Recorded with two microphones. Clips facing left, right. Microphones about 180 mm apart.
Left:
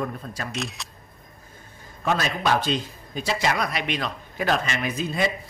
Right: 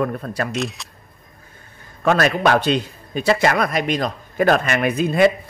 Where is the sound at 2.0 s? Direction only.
70° right (ahead or behind).